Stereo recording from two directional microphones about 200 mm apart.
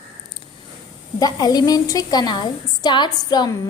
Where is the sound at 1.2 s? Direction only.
20° left (ahead or behind).